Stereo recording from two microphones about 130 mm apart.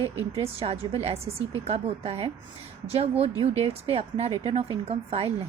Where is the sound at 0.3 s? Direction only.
50° right (ahead or behind).